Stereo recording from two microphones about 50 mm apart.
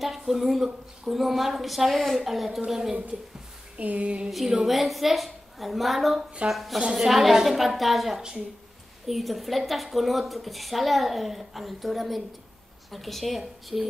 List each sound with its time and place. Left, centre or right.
0.0 s a woman's voice: centre
3.7 s a sound: right
4.3 s a woman's voice: centre